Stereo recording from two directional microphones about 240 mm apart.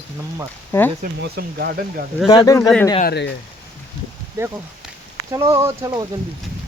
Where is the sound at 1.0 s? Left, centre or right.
Right.